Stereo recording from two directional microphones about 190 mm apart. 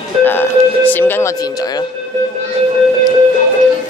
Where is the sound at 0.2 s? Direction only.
10° left (ahead or behind).